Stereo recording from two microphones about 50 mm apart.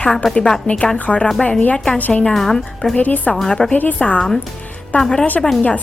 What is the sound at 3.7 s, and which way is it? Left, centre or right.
Speech, left.